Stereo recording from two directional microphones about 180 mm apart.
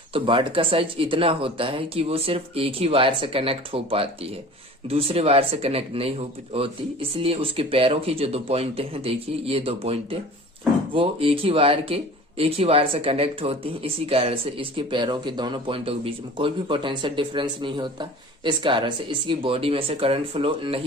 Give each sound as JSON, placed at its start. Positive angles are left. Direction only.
{"t": 0.1, "sound": "speech", "side_deg": -30}